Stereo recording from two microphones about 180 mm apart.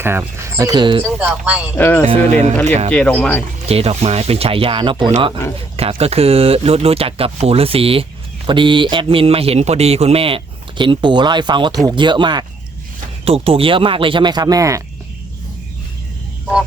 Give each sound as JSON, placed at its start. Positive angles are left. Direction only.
{"t": 0.0, "sound": "speech", "side_deg": -15}
{"t": 1.0, "sound": "speech", "side_deg": -10}
{"t": 1.7, "sound": "speech", "side_deg": 10}
{"t": 2.0, "sound": "speech", "side_deg": -35}
{"t": 2.9, "sound": "speech", "side_deg": 10}
{"t": 3.7, "sound": "a man's voice", "side_deg": -35}